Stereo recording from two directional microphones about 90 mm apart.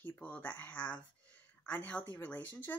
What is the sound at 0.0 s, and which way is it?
Speech, 20° left (ahead or behind).